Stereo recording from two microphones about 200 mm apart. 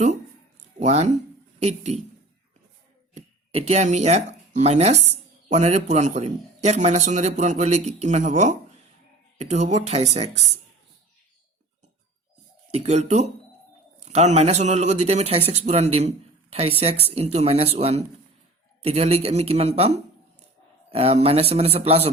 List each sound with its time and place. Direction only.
0.8 s a man's voice: 35° right (ahead or behind)
3.2 s a man's voice: 35° right (ahead or behind)
12.7 s a man's voice: 30° right (ahead or behind)